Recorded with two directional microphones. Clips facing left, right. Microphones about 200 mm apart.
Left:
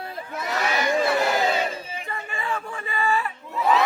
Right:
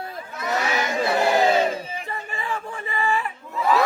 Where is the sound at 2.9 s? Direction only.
20° right (ahead or behind).